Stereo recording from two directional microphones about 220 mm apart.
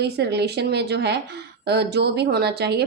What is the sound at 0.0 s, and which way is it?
A woman's voice, 50° right (ahead or behind).